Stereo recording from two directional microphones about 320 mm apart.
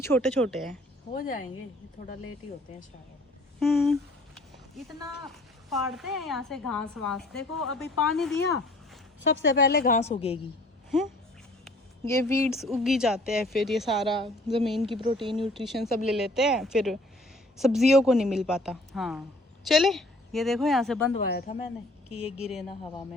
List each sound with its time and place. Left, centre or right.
0.0 s a woman's voice: centre
1.1 s a woman's voice: left
3.6 s a woman's voice: centre
5.7 s a woman's voice: centre
9.2 s a woman's voice: left; by 10.4 s centre
11.6 s a woman's voice: centre
15.0 s speech: centre
15.5 s a woman's voice: centre
21.1 s a woman's voice: left
22.1 s a woman's voice: centre